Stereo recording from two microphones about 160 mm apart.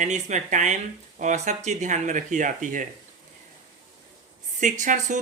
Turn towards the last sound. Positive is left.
turn(degrees=-50)  # may be behind; listen again after turning